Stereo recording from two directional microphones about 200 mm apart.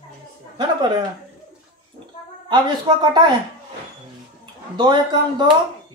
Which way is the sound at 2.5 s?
20° right (ahead or behind).